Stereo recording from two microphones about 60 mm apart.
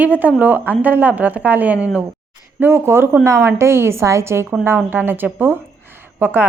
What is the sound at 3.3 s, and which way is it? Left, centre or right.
A woman's voice, right.